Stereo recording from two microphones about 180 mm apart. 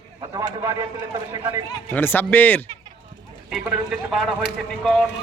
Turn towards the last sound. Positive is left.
turn(degrees=0)  # may be behind; listen again after turning